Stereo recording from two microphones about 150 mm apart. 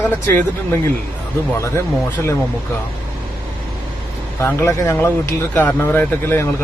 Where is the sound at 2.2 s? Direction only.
5° left (ahead or behind).